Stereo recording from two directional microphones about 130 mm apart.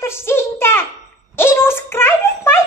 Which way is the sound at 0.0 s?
20° left (ahead or behind).